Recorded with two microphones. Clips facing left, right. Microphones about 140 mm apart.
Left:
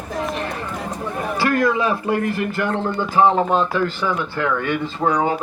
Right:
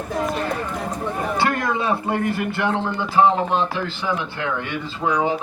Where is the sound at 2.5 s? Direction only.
45° left (ahead or behind).